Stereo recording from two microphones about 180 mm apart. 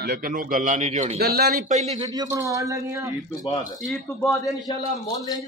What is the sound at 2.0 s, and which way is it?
A man's voice, 20° right (ahead or behind).